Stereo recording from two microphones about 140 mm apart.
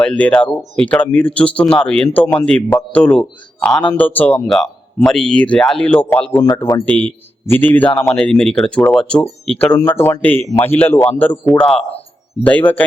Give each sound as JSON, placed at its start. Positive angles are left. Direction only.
{"t": 0.0, "sound": "speech", "side_deg": 10}
{"t": 6.4, "sound": "speech", "side_deg": 25}
{"t": 11.8, "sound": "speech", "side_deg": 45}
{"t": 12.4, "sound": "speech", "side_deg": 10}